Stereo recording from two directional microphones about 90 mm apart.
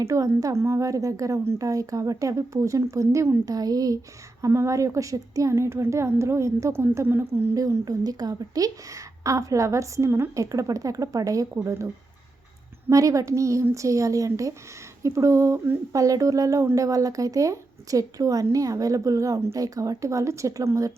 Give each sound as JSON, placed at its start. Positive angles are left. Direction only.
{"t": 0.0, "sound": "a woman's voice", "side_deg": -40}
{"t": 3.4, "sound": "a woman's voice", "side_deg": -45}
{"t": 7.5, "sound": "a woman's voice", "side_deg": -40}
{"t": 12.9, "sound": "a woman's voice", "side_deg": -35}
{"t": 15.9, "sound": "a woman's voice", "side_deg": -40}